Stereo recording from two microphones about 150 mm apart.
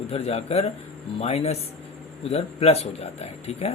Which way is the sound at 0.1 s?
40° left (ahead or behind).